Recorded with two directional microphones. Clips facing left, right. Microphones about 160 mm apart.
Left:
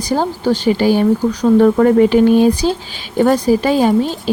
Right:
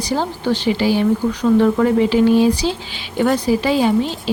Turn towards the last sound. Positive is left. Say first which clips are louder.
# left 3 dB
turn(degrees=45)  # may be behind; listen again after turning